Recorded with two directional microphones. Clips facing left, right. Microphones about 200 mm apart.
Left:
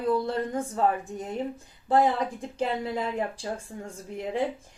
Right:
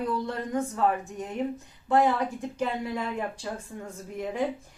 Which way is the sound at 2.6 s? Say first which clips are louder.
Left 2 dB; 30° left (ahead or behind).